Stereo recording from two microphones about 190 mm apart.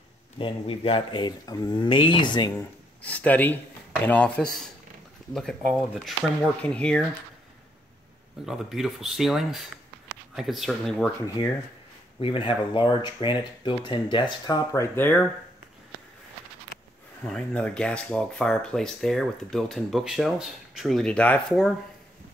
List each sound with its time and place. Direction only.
0.4 s speech: 30° left (ahead or behind)
3.0 s speech: 10° left (ahead or behind)
8.5 s speech: centre (ahead or behind)
12.2 s speech: 25° left (ahead or behind); by 15.2 s 10° left (ahead or behind)
17.3 s speech: 5° left (ahead or behind)